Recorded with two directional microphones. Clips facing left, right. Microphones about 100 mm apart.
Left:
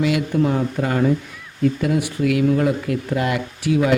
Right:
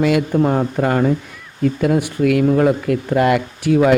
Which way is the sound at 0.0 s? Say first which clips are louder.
Right 4 dB; 50° right (ahead or behind).